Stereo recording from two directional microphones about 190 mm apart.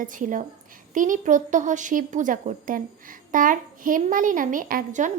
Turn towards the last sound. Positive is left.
turn(degrees=-45)  # may be behind; listen again after turning